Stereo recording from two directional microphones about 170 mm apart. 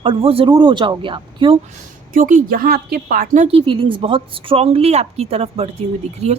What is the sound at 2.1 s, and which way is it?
Speech, 50° right (ahead or behind).